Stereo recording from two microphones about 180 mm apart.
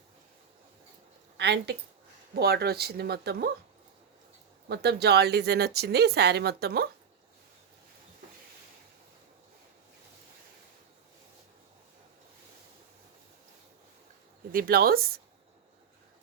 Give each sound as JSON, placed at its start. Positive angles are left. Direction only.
{"t": 1.4, "sound": "speech", "side_deg": -65}
{"t": 4.7, "sound": "speech", "side_deg": -65}
{"t": 14.5, "sound": "speech", "side_deg": -55}